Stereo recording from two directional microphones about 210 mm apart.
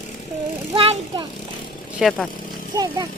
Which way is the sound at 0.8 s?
25° right (ahead or behind).